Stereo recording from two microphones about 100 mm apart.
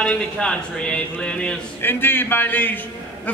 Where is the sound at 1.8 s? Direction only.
20° left (ahead or behind).